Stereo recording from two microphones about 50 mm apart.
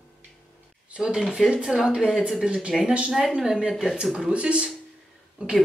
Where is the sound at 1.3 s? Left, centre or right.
Centre.